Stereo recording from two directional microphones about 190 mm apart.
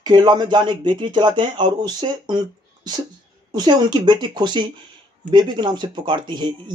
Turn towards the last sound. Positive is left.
turn(degrees=-25)  # may be behind; listen again after turning